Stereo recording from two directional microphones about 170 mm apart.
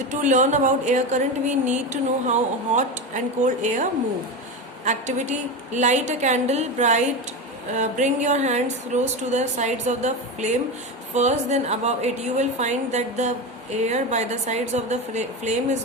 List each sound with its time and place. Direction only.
0.1 s a woman's voice: 45° right (ahead or behind)
4.9 s a woman's voice: 45° right (ahead or behind)